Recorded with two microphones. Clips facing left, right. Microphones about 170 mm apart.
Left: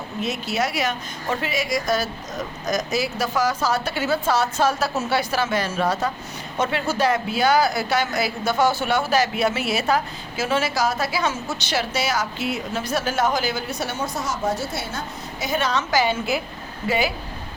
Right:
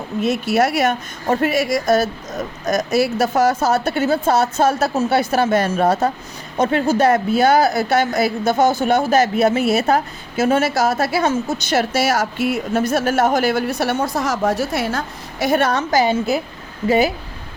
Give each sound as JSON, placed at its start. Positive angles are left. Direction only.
{"t": 0.2, "sound": "a woman's voice", "side_deg": -50}
{"t": 14.7, "sound": "a woman's voice", "side_deg": -85}